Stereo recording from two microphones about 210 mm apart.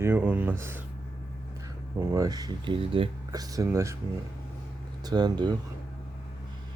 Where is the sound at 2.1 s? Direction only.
15° right (ahead or behind).